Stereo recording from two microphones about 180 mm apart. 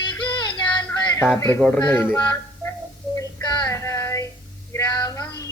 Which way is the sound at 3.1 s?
15° left (ahead or behind).